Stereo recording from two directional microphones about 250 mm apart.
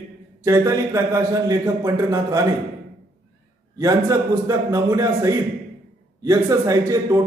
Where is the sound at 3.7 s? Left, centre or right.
Centre.